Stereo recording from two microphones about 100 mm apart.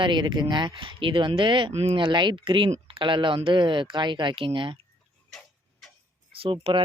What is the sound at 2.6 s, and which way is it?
Speech, 75° right (ahead or behind).